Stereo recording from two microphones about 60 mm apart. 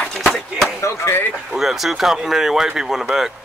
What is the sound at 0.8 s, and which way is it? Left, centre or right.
Speech, left.